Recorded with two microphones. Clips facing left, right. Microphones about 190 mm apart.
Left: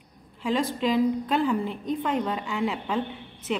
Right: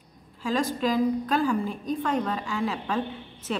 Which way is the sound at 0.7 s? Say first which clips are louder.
Left 1 dB; 20° left (ahead or behind).